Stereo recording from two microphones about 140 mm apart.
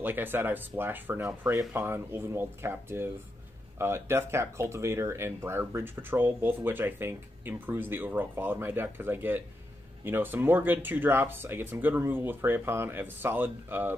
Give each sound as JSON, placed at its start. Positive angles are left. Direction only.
{"t": 0.0, "sound": "speech", "side_deg": -15}